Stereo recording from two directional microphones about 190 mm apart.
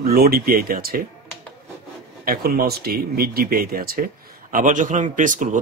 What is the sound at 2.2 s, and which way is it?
Speech, 50° right (ahead or behind).